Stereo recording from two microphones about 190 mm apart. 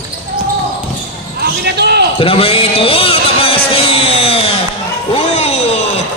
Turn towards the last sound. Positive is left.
turn(degrees=35)  # may be behind; listen again after turning